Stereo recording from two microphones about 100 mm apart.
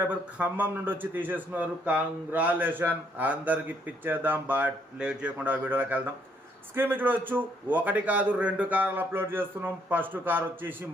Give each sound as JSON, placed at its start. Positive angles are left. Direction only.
{"t": 0.0, "sound": "a man's voice", "side_deg": -15}